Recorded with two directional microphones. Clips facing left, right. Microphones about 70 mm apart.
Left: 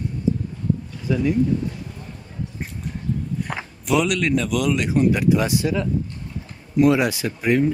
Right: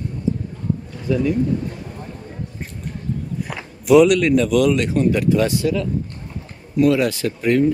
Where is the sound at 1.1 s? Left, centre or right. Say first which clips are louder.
Right 3 dB; centre.